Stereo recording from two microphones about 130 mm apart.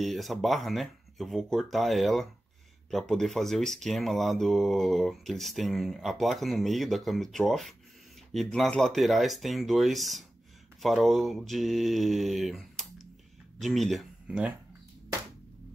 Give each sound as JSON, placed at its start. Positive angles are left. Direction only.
{"t": 0.0, "sound": "speech", "side_deg": 0}